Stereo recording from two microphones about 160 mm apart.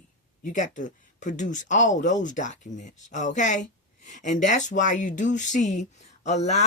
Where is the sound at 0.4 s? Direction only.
50° left (ahead or behind).